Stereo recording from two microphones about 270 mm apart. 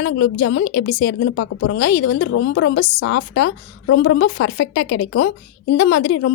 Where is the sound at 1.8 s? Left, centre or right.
Left.